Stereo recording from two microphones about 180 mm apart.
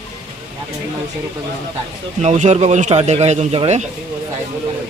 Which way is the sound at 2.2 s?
40° right (ahead or behind).